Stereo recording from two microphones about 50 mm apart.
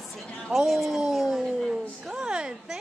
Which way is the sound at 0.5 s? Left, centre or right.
Centre.